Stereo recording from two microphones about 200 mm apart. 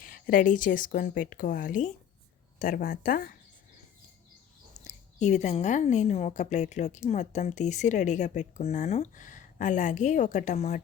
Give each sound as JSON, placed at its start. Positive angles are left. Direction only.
{"t": 0.0, "sound": "a woman's voice", "side_deg": 40}
{"t": 4.8, "sound": "a woman's voice", "side_deg": 35}